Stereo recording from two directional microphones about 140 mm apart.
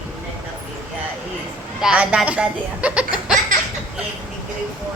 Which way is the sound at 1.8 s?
5° right (ahead or behind).